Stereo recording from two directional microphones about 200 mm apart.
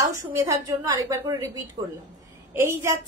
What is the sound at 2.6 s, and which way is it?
Speech, 15° right (ahead or behind).